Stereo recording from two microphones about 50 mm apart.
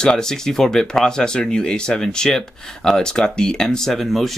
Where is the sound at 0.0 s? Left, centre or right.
Centre.